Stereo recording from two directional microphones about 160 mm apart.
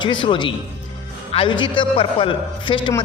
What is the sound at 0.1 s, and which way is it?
A man's voice, 30° left (ahead or behind).